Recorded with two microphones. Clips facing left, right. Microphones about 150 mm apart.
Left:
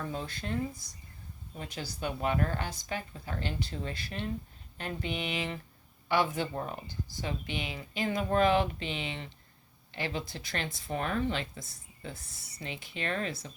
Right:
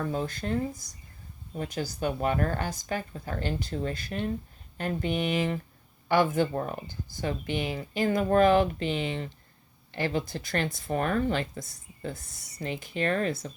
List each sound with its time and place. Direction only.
0.1 s speech: 45° right (ahead or behind)
1.5 s speech: 45° right (ahead or behind)